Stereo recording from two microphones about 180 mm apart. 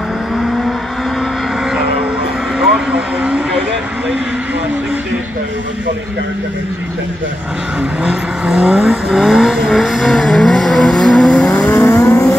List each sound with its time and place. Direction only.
3.2 s vehicle: 5° right (ahead or behind)
8.0 s vehicle: 5° right (ahead or behind)
11.7 s vehicle: 15° left (ahead or behind)